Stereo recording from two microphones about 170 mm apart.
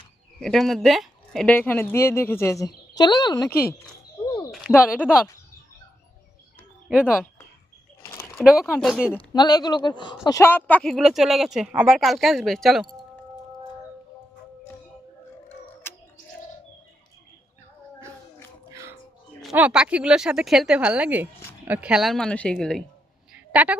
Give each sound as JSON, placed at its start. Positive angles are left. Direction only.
{"t": 0.3, "sound": "speech", "side_deg": 5}
{"t": 4.5, "sound": "speech", "side_deg": -5}
{"t": 6.8, "sound": "speech", "side_deg": -5}
{"t": 8.0, "sound": "a sound", "side_deg": 15}
{"t": 8.8, "sound": "speech", "side_deg": -5}
{"t": 9.3, "sound": "speech", "side_deg": 25}
{"t": 15.9, "sound": "bird", "side_deg": 15}
{"t": 18.7, "sound": "a sound", "side_deg": -15}
{"t": 19.4, "sound": "speech", "side_deg": -5}
{"t": 23.3, "sound": "a sound", "side_deg": -10}